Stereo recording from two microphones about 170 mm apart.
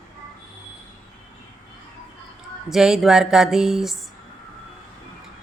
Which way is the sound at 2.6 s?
Centre (ahead or behind).